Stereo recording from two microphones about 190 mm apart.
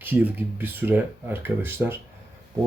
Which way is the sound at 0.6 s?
10° right (ahead or behind).